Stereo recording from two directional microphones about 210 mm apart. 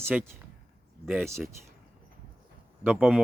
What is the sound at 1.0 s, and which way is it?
Speech, centre (ahead or behind).